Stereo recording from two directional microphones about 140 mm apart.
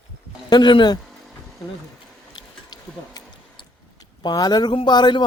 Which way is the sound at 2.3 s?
30° left (ahead or behind).